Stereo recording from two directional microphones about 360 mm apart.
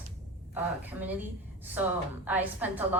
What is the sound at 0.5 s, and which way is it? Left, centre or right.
Speech, centre.